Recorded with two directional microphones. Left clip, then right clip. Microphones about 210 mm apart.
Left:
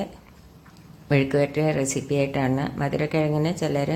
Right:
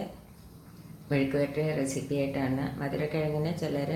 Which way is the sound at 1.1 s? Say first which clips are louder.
Left 7 dB; 50° left (ahead or behind).